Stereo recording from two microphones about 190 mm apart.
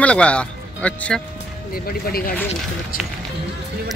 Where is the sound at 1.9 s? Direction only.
50° left (ahead or behind).